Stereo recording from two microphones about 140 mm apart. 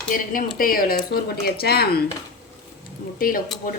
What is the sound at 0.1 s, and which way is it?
Speech, 85° left.